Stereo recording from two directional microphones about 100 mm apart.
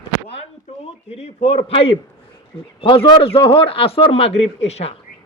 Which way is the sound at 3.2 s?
70° left (ahead or behind).